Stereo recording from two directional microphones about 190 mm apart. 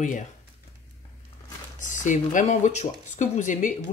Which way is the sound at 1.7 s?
40° left (ahead or behind).